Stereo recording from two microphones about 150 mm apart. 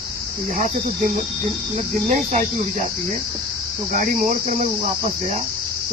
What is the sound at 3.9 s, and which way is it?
Cricket, 60° right (ahead or behind).